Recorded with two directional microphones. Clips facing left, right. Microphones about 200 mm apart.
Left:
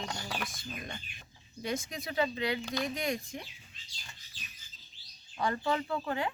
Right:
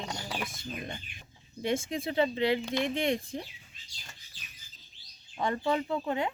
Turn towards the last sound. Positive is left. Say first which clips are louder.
# right 3 dB
turn(degrees=-20)  # may be behind; listen again after turning